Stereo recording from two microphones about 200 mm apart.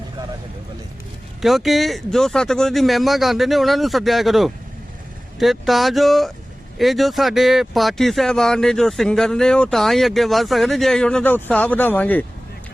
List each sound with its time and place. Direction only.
1.4 s speech: centre (ahead or behind)